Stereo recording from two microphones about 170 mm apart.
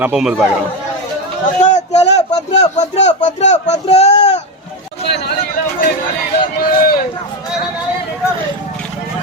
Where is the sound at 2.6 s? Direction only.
40° left (ahead or behind).